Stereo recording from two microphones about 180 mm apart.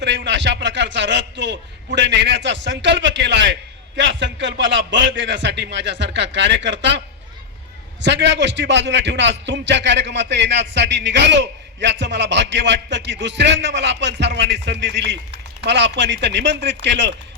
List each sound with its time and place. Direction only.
0.0 s a man's voice: 75° right (ahead or behind)
8.0 s a man's voice: 75° right (ahead or behind)